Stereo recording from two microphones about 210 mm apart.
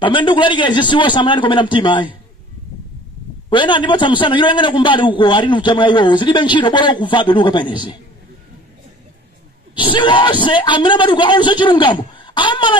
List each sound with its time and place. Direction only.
0.0 s a man's voice: 25° left (ahead or behind)
3.4 s a man's voice: 25° left (ahead or behind)
9.8 s a man's voice: 25° left (ahead or behind)